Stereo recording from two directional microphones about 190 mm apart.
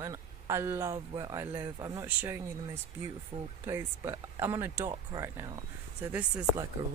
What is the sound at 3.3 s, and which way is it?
Speech, 40° right (ahead or behind).